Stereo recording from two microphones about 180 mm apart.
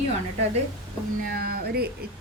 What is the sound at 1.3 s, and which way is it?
Speech, 55° right (ahead or behind).